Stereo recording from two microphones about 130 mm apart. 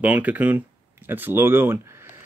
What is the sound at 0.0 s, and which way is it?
Speech, 10° right (ahead or behind).